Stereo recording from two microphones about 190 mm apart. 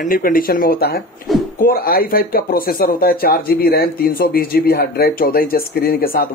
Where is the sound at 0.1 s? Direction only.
50° left (ahead or behind).